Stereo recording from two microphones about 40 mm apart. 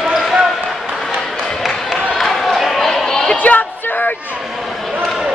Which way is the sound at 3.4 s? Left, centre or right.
Left.